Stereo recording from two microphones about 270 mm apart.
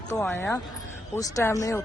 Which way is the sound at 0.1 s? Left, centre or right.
Centre.